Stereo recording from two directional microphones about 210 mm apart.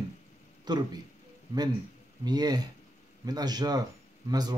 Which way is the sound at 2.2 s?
20° right (ahead or behind).